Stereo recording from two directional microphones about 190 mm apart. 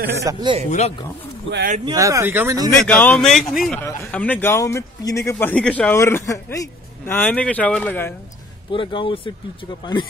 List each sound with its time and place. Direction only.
0.2 s speech: 20° right (ahead or behind)
0.7 s speech: 35° left (ahead or behind)
1.9 s speech: 15° right (ahead or behind)
2.8 s a man's voice: 5° left (ahead or behind)
8.7 s speech: 25° left (ahead or behind)